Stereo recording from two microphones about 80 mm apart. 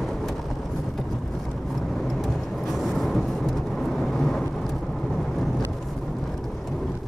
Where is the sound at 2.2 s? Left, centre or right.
Centre.